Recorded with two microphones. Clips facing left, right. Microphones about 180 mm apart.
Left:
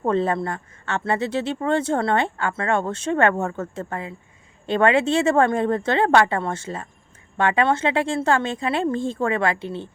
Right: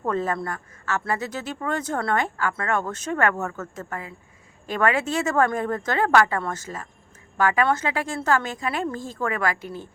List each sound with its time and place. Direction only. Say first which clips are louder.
0.0 s speech: left 4 dB; 30° left (ahead or behind)